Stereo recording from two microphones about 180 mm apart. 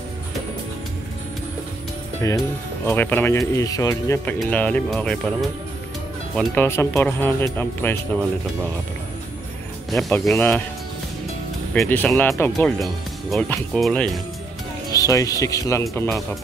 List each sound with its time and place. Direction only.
2.2 s speech: 15° left (ahead or behind)
9.8 s speech: centre (ahead or behind)
11.8 s speech: 10° left (ahead or behind)
14.9 s speech: 20° left (ahead or behind)